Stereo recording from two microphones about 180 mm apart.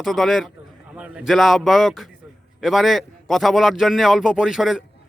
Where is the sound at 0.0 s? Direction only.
Centre (ahead or behind).